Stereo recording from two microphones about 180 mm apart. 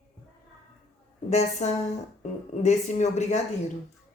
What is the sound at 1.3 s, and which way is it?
Speech, 40° left (ahead or behind).